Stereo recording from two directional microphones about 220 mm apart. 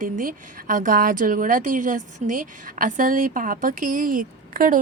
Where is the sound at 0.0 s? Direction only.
40° right (ahead or behind).